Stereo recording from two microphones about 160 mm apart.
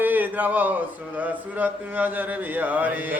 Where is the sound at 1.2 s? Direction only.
10° right (ahead or behind).